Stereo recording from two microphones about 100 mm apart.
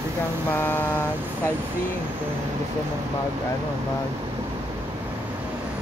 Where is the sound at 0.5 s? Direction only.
20° left (ahead or behind).